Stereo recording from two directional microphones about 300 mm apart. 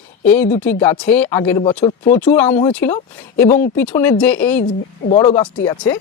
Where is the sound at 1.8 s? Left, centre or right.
Left.